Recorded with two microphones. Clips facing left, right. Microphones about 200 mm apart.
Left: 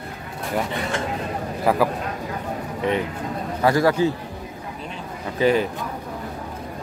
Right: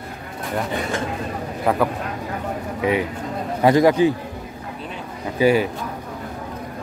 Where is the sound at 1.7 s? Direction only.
Centre (ahead or behind).